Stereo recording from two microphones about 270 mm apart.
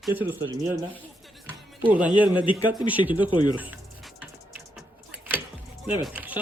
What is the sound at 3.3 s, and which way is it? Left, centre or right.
Speech, centre.